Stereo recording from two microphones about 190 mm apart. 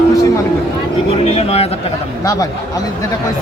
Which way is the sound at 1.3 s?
35° left (ahead or behind).